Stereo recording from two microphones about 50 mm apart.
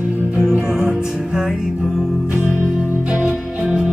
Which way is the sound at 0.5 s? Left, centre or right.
Centre.